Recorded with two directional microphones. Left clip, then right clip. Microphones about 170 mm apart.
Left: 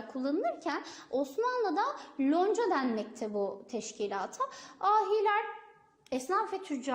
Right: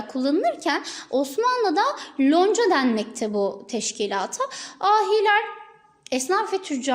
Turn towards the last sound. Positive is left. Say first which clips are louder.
# right 9 dB
turn(degrees=-30)  # may be behind; listen again after turning